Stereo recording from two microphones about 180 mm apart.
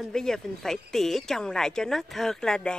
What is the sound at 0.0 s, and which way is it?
Speech, 5° left (ahead or behind).